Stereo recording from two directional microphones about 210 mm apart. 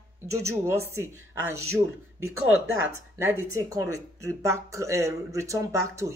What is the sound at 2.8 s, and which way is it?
Speech, 10° right (ahead or behind).